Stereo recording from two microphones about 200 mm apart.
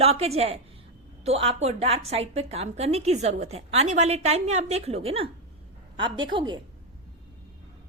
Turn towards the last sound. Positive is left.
turn(degrees=-25)  # may be behind; listen again after turning